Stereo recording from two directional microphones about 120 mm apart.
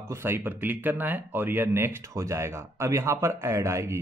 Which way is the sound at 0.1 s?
20° right (ahead or behind).